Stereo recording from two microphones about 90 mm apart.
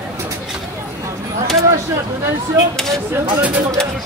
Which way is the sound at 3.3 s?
15° right (ahead or behind).